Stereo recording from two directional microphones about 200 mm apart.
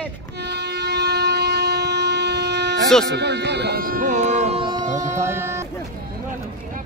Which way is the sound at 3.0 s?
60° right (ahead or behind).